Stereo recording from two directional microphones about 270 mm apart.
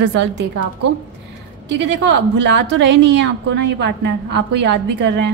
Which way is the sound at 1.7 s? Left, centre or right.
Right.